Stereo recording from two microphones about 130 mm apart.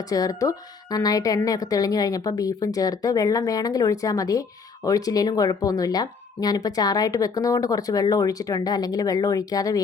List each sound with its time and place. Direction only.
0.1 s a woman's voice: 25° left (ahead or behind)